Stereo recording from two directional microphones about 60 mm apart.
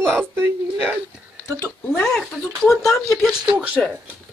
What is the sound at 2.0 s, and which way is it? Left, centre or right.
Speech, centre.